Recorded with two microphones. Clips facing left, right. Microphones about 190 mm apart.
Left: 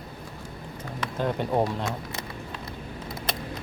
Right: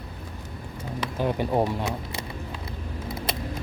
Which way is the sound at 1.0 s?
10° right (ahead or behind).